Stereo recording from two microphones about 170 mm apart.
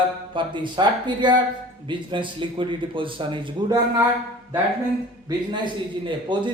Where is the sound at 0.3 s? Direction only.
30° right (ahead or behind).